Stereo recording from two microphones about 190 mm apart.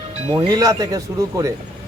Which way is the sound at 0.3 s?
20° right (ahead or behind).